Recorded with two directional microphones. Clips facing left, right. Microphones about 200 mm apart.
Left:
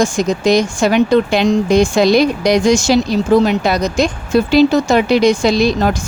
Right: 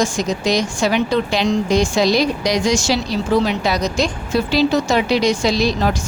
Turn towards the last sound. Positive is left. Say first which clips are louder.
# left 4 dB
turn(degrees=55)  # may be behind; listen again after turning